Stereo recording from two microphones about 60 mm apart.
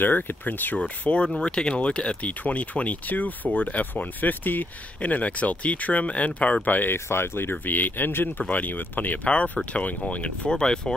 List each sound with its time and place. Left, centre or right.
0.0 s speech: left
0.7 s speech: centre
7.1 s speech: left; by 10.8 s centre